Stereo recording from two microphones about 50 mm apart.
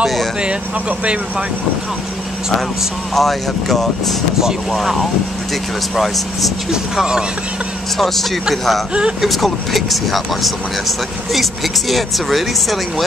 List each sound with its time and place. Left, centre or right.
0.0 s vehicle: centre
0.4 s speech: right
3.2 s speech: centre
4.4 s speech: centre
6.7 s speech: centre
8.0 s speech: centre